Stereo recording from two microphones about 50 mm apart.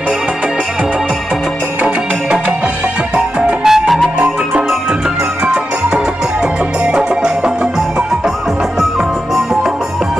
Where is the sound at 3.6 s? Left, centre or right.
Centre.